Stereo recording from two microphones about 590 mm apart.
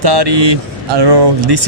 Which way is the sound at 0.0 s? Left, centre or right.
Right.